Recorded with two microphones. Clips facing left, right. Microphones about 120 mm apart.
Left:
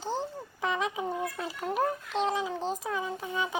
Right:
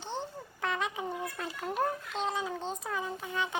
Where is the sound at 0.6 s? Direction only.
15° left (ahead or behind).